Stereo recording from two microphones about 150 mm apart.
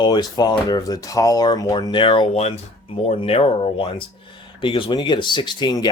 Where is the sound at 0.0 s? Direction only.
30° left (ahead or behind).